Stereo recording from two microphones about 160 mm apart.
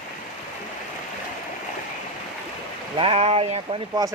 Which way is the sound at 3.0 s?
35° right (ahead or behind).